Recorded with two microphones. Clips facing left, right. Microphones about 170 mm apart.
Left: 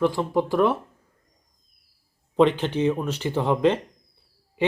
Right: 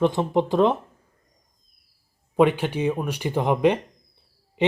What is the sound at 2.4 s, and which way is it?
Speech, 10° right (ahead or behind).